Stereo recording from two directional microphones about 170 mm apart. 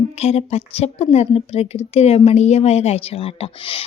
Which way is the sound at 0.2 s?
40° left (ahead or behind).